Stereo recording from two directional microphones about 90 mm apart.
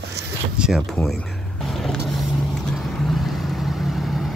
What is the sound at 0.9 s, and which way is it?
Speech, 5° left (ahead or behind).